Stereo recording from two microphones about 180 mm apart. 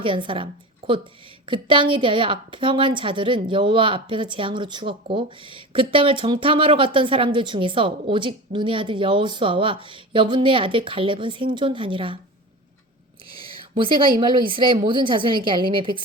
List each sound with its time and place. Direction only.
0.0 s a woman's voice: 30° right (ahead or behind)
1.5 s a woman's voice: 30° right (ahead or behind)
13.6 s a woman's voice: 30° right (ahead or behind)